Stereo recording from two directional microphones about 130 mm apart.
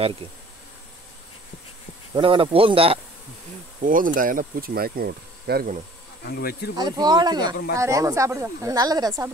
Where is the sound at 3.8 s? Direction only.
90° right.